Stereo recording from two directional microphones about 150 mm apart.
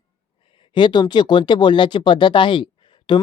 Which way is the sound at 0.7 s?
30° left (ahead or behind).